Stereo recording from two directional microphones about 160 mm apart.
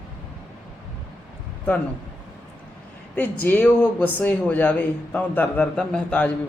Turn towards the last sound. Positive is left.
turn(degrees=5)  # may be behind; listen again after turning